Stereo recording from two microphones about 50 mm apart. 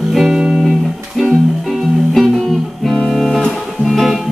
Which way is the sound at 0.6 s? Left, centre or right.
Centre.